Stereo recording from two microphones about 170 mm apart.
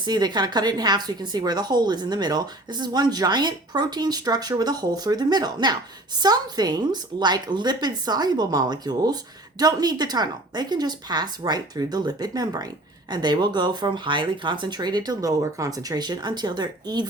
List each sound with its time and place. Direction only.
0.0 s a woman's voice: 25° right (ahead or behind)